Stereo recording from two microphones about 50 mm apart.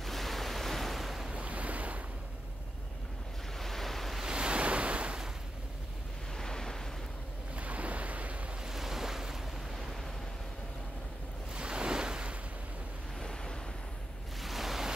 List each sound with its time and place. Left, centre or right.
0.0 s waves: centre
1.3 s waves: right
3.5 s waves: centre
4.2 s waves: centre
6.3 s waves: centre
7.5 s waves: right
8.6 s waves: centre
11.5 s waves: centre
13.2 s waves: centre
14.4 s pink noise: centre